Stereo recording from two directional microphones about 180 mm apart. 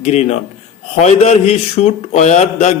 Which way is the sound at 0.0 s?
35° left (ahead or behind).